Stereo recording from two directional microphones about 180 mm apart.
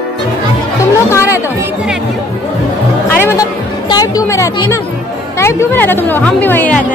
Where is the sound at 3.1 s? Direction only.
15° left (ahead or behind).